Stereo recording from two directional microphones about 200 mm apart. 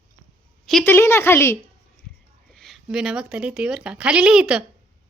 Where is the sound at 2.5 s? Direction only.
Centre (ahead or behind).